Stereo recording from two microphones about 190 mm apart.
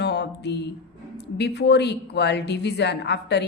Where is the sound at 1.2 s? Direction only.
60° left (ahead or behind).